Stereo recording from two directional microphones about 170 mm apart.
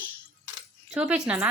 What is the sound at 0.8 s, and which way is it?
Speech, 5° right (ahead or behind).